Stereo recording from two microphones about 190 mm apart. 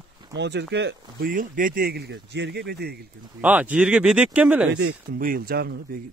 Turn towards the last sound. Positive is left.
turn(degrees=-55)  # may be behind; listen again after turning